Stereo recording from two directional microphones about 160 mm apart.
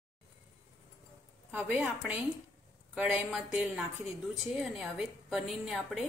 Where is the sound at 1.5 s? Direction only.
10° right (ahead or behind).